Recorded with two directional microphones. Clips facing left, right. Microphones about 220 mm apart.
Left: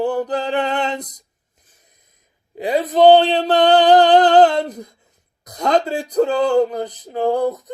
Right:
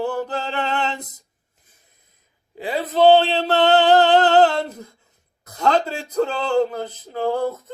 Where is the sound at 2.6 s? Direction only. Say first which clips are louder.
Left 4 dB; 15° left (ahead or behind).